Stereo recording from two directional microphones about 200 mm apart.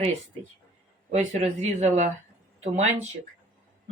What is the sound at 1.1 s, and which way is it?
Speech, 35° right (ahead or behind).